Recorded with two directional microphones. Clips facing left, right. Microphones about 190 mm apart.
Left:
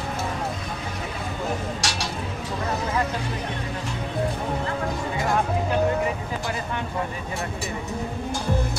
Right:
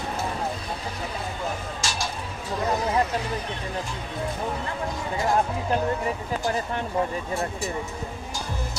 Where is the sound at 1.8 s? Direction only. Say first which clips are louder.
Left 1 dB; 70° left (ahead or behind).